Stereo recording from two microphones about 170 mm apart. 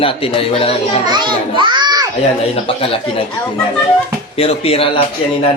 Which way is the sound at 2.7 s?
35° left (ahead or behind).